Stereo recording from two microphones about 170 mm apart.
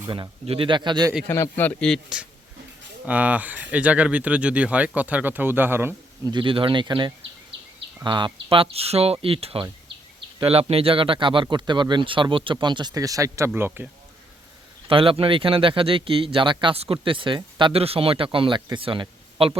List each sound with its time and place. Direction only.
0.1 s speech: 30° right (ahead or behind)
1.3 s a man's voice: 15° left (ahead or behind); by 6.3 s 15° right (ahead or behind)
6.3 s speech: 30° right (ahead or behind); by 13.9 s 15° right (ahead or behind)
14.8 s speech: 30° right (ahead or behind)